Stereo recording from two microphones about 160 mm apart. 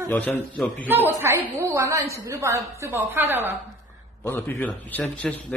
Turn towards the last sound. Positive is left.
turn(degrees=10)  # may be behind; listen again after turning